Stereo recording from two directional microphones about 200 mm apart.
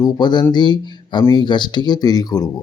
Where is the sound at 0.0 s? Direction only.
20° left (ahead or behind).